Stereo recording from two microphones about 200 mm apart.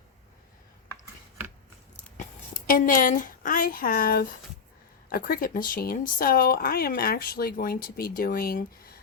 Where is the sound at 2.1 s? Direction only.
45° left (ahead or behind).